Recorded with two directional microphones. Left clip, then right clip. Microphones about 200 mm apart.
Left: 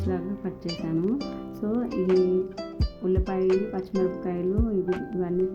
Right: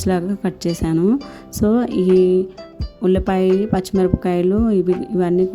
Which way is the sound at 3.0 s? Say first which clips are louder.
Right 9 dB; 50° right (ahead or behind).